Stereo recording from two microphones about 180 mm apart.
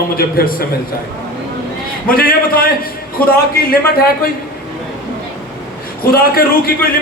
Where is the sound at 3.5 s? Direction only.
55° left (ahead or behind).